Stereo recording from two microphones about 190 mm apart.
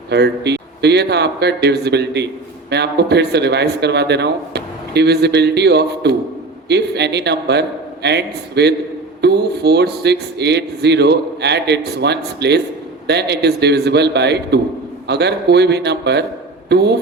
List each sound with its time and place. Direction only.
0.1 s speech: 60° right (ahead or behind)